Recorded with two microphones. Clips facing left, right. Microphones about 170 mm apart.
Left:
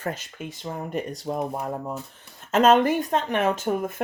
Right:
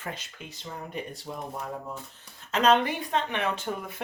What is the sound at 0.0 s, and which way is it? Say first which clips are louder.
Speech: left 7 dB; 45° left (ahead or behind).